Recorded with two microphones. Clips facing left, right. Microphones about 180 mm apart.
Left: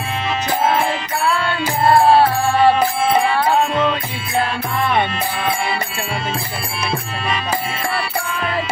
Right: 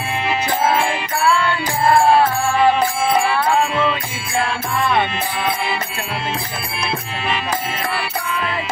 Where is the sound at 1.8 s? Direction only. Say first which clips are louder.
Left 2 dB; 30° left (ahead or behind).